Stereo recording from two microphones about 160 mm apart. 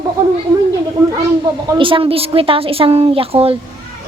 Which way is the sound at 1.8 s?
35° right (ahead or behind).